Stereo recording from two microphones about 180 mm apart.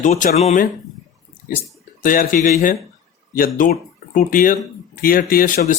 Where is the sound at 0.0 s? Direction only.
40° left (ahead or behind).